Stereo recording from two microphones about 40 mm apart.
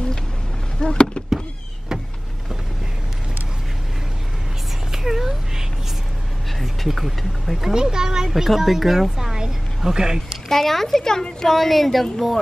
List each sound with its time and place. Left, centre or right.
0.7 s a sound: left
4.9 s cat: centre
6.9 s speech: centre
7.7 s a child's voice: centre
8.3 s speech: centre
10.5 s a child's voice: centre